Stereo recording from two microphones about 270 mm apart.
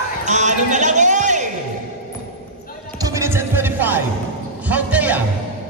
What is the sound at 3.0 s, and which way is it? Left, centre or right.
Music, centre.